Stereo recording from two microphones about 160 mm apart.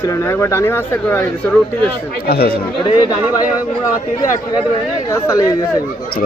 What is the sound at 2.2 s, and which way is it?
Speech, 75° left (ahead or behind).